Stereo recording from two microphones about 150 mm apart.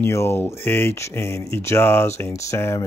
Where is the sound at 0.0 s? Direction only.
15° left (ahead or behind).